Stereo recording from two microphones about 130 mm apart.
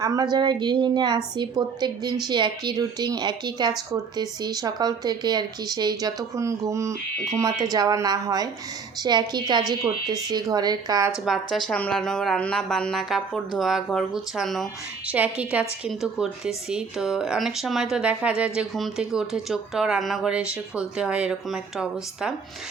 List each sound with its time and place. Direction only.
0.0 s a woman's voice: 30° right (ahead or behind)
11.3 s speech: centre (ahead or behind)
15.0 s a woman's voice: 10° right (ahead or behind)